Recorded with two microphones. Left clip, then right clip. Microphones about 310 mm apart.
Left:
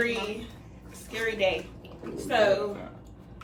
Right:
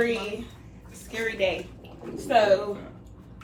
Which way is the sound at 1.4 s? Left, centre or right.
Centre.